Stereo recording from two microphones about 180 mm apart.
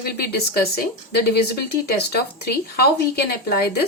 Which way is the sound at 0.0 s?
60° left (ahead or behind).